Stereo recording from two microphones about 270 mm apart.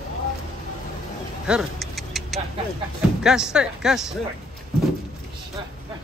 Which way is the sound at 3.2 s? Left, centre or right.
Centre.